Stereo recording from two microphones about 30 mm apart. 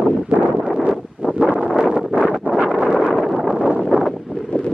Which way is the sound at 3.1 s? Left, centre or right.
Centre.